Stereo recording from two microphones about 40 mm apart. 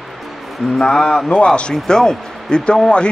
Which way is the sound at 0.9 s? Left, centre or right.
Centre.